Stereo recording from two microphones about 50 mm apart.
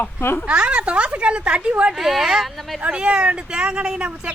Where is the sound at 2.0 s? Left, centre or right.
Centre.